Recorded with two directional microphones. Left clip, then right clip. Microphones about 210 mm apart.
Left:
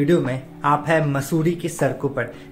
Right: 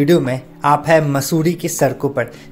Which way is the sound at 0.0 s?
25° right (ahead or behind).